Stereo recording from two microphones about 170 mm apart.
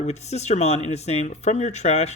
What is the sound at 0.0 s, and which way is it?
A man's voice, 40° left (ahead or behind).